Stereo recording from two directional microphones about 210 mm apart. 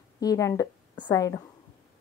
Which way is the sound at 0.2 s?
15° left (ahead or behind).